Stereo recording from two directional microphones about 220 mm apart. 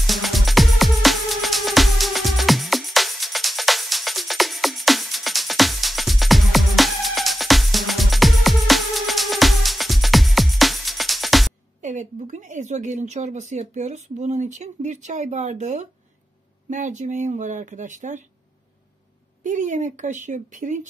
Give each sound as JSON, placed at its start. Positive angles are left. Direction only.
{"t": 0.0, "sound": "music", "side_deg": 0}
{"t": 11.8, "sound": "speech", "side_deg": -35}
{"t": 19.4, "sound": "speech", "side_deg": -35}